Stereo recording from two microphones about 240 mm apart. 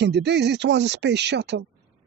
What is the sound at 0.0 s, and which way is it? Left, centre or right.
Speech, right.